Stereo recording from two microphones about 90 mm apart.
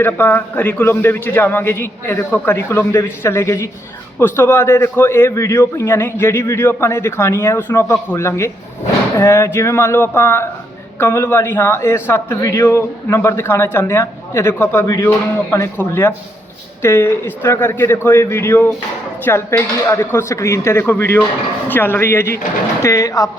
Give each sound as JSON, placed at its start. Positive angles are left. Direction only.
{"t": 0.0, "sound": "a man's voice", "side_deg": 20}
{"t": 12.4, "sound": "a man's voice", "side_deg": 40}
{"t": 14.8, "sound": "speech", "side_deg": 40}
{"t": 15.8, "sound": "a man's voice", "side_deg": 25}